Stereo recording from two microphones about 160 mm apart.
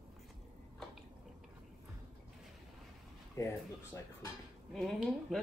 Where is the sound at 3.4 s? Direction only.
20° left (ahead or behind).